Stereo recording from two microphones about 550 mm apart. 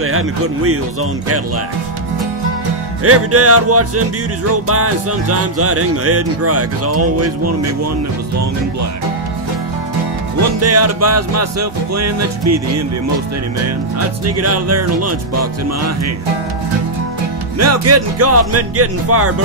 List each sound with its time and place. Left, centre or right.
3.0 s speech: right
10.6 s speech: right
13.9 s speech: right
17.6 s speech: right